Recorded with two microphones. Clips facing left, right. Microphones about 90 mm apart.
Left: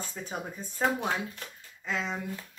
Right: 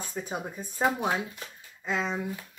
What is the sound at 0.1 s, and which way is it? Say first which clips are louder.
Speech: right 3 dB; 15° right (ahead or behind).